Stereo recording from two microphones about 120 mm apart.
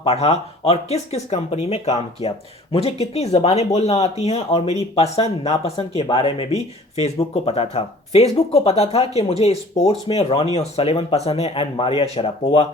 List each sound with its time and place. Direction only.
0.0 s speech: 55° left (ahead or behind)